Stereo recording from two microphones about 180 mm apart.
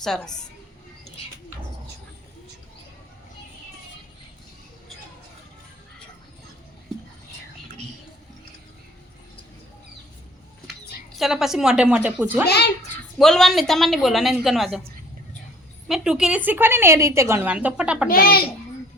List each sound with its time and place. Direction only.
0.0 s a woman's voice: 5° left (ahead or behind)
11.2 s a woman's voice: centre (ahead or behind)
15.9 s a woman's voice: 5° right (ahead or behind)
18.1 s a child's voice: 55° left (ahead or behind)